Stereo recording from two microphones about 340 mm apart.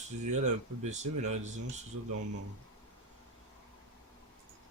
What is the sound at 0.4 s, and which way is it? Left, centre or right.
Speech, right.